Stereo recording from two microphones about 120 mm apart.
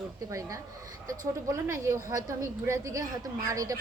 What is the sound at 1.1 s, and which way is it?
Speech, 25° right (ahead or behind).